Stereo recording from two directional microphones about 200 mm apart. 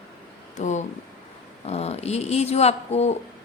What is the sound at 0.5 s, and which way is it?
A woman's voice, 35° left (ahead or behind).